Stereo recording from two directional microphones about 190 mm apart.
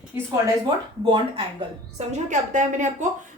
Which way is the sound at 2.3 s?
40° right (ahead or behind).